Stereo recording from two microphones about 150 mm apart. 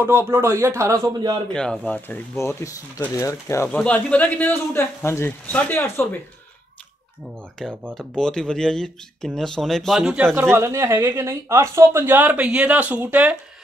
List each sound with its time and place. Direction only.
0.0 s a man's voice: 15° right (ahead or behind)
1.5 s a man's voice: 5° left (ahead or behind); by 3.6 s 20° left (ahead or behind)
3.6 s a man's voice: 10° left (ahead or behind)
7.9 s speech: 5° left (ahead or behind)
10.5 s speech: 20° right (ahead or behind)